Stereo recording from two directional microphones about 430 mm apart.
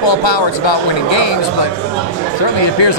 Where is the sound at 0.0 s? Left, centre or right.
Left.